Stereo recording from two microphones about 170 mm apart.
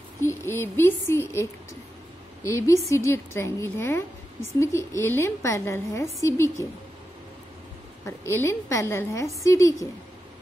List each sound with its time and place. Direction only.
0.2 s a woman's voice: 15° left (ahead or behind)
8.0 s a woman's voice: 15° left (ahead or behind)